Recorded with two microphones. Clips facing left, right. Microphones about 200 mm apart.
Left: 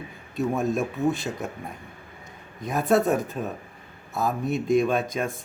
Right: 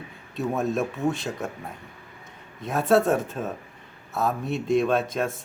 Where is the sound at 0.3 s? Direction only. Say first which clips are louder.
Left 1 dB; centre (ahead or behind).